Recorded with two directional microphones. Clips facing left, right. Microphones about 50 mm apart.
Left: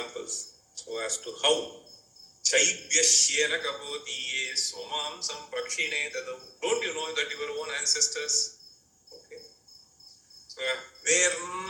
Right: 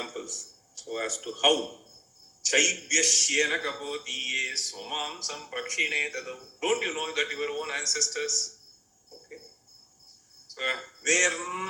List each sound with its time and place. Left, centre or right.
0.0 s a sound: right
2.4 s a man's voice: right
10.5 s speech: right